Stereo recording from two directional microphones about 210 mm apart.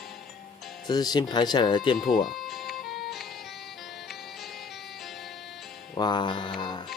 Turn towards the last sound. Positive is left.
turn(degrees=20)  # may be behind; listen again after turning